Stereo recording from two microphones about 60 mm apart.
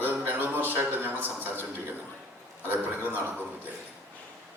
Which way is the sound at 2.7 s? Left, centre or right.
Right.